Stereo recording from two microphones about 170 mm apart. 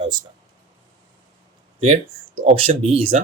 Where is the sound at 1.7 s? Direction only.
40° right (ahead or behind).